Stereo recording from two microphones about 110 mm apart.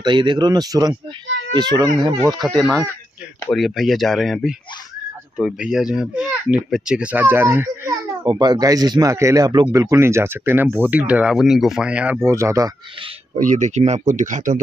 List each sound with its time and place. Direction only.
0.0 s speech: 45° right (ahead or behind)
2.4 s a child's voice: centre (ahead or behind); by 8.0 s 25° right (ahead or behind)
8.3 s speech: 40° right (ahead or behind); by 12.2 s 10° right (ahead or behind)
12.2 s speech: 25° right (ahead or behind)
13.3 s speech: 90° right